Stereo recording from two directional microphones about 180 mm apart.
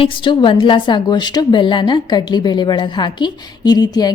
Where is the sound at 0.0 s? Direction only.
25° left (ahead or behind).